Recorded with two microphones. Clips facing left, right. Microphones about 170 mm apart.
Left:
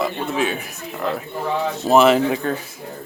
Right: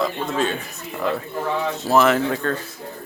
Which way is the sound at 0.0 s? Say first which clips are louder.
Left 1 dB; 10° left (ahead or behind).